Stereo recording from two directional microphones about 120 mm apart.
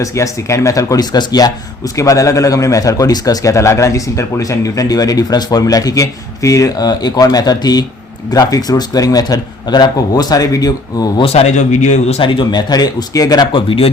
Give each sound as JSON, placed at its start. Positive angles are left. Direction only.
{"t": 0.0, "sound": "a man's voice", "side_deg": 25}
{"t": 11.2, "sound": "speech", "side_deg": 55}
{"t": 12.2, "sound": "a man's voice", "side_deg": 40}
{"t": 13.5, "sound": "speech", "side_deg": 50}